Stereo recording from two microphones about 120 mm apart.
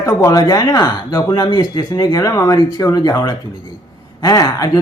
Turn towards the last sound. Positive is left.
turn(degrees=30)  # may be behind; listen again after turning